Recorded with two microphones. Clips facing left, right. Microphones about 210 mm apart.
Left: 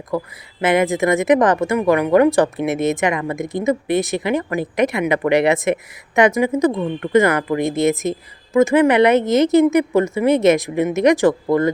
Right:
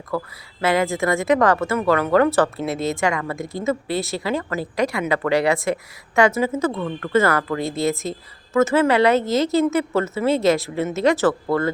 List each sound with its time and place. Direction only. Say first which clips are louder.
0.1 s a woman's voice: left 3 dB; 20° left (ahead or behind)